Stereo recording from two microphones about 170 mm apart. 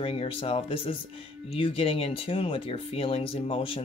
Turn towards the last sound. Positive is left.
turn(degrees=30)  # may be behind; listen again after turning